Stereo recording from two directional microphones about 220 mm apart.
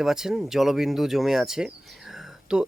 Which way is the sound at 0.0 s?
Centre (ahead or behind).